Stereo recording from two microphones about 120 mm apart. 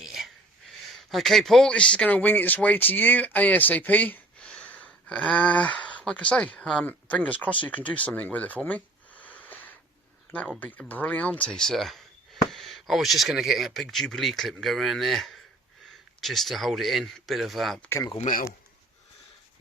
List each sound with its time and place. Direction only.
0.0 s a sound: 5° right (ahead or behind)
1.1 s speech: centre (ahead or behind)
17.8 s speech: 20° left (ahead or behind)